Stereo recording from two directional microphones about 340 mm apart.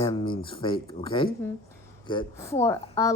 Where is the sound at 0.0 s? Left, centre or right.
Centre.